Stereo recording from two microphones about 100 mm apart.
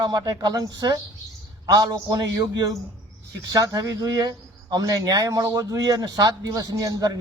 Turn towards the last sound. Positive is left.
turn(degrees=-40)  # may be behind; listen again after turning